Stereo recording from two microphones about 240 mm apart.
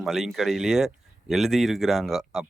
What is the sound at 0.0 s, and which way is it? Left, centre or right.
Speech, centre.